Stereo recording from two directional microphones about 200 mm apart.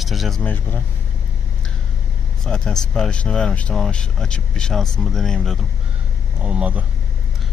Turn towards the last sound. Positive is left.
turn(degrees=-5)  # may be behind; listen again after turning